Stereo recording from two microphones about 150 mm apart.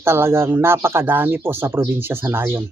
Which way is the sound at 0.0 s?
15° right (ahead or behind).